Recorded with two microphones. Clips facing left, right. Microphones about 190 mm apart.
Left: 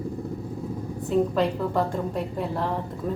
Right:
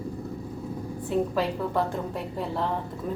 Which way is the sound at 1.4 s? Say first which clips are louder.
Left 2 dB; centre (ahead or behind).